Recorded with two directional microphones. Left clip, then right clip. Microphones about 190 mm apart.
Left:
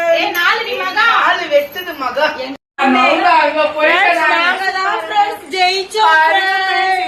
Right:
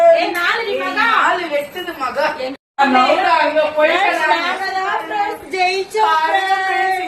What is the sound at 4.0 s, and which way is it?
Chatter, 10° right (ahead or behind).